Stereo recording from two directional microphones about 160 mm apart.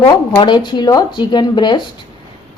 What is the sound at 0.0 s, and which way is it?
A woman's voice, 30° left (ahead or behind).